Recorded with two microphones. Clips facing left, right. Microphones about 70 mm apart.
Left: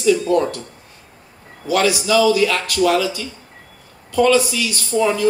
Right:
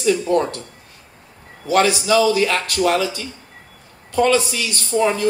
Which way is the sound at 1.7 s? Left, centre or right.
Right.